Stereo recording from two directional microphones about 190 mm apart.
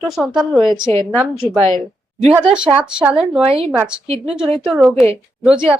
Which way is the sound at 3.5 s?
30° right (ahead or behind).